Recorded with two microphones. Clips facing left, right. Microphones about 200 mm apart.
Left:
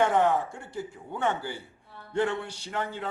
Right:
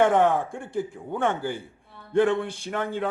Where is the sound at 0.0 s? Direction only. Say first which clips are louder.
Right 4 dB; 55° right (ahead or behind).